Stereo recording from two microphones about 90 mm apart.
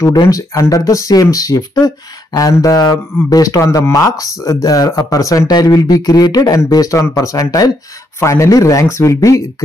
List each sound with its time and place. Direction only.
0.3 s speech: 40° left (ahead or behind)